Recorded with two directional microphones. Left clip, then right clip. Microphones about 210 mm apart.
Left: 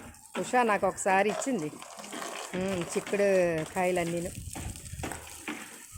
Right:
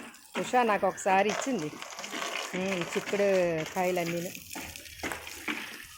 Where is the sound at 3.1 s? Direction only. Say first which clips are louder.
Left 1 dB; 10° left (ahead or behind).